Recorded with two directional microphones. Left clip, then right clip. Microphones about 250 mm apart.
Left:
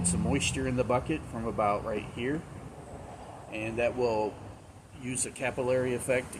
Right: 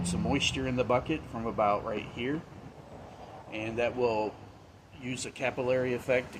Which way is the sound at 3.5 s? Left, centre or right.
Centre.